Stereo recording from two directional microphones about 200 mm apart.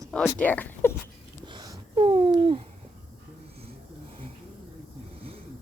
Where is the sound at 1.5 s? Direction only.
25° right (ahead or behind).